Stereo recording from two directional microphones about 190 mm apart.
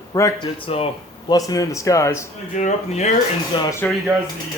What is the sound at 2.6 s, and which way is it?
Speech, 35° left (ahead or behind).